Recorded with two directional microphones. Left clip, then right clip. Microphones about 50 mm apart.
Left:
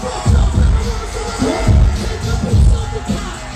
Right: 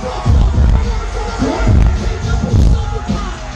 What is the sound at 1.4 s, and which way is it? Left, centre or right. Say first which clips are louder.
Music: even; left.